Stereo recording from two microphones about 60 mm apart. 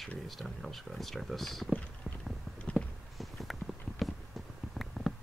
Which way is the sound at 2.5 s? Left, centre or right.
Centre.